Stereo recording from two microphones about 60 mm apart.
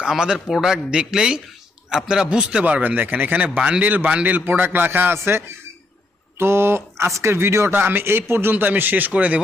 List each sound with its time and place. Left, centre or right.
0.0 s a man's voice: centre
0.3 s a man's voice: centre
2.8 s a man's voice: right
6.4 s speech: right
8.5 s a man's voice: right